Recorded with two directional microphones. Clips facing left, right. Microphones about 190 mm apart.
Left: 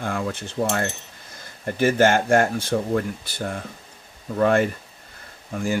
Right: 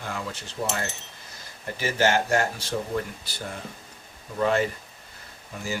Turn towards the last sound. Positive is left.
turn(degrees=55)  # may be behind; listen again after turning